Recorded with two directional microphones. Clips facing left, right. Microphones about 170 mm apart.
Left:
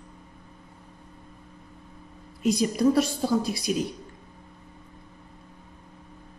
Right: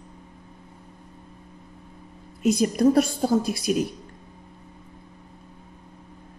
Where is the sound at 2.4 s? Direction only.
50° right (ahead or behind).